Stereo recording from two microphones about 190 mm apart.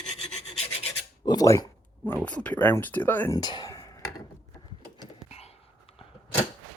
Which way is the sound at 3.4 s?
20° left (ahead or behind).